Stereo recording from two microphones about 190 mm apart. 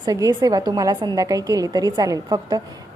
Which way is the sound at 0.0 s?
20° right (ahead or behind).